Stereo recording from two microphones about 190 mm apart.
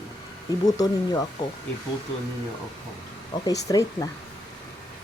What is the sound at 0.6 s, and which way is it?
Speech, 20° left (ahead or behind).